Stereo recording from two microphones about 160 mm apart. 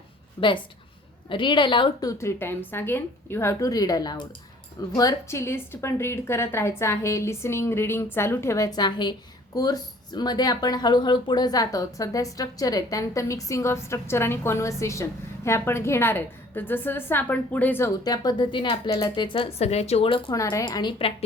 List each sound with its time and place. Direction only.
0.3 s a woman's voice: 30° left (ahead or behind)
20.3 s speech: 20° left (ahead or behind)